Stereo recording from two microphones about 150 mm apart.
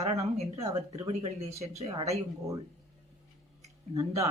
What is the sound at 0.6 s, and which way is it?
Speech, 25° right (ahead or behind).